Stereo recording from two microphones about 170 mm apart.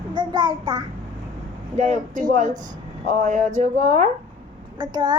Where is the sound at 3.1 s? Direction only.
45° right (ahead or behind).